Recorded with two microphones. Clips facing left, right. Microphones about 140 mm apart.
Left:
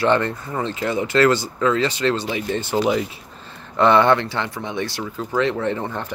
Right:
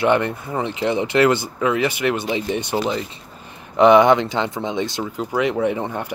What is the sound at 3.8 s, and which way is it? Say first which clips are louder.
Speech: right 3 dB; 15° right (ahead or behind).